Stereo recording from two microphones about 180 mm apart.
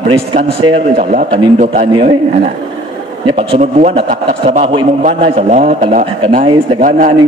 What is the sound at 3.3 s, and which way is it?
A man's voice, 30° right (ahead or behind).